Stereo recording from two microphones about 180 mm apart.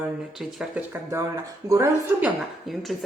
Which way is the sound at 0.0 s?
5° right (ahead or behind).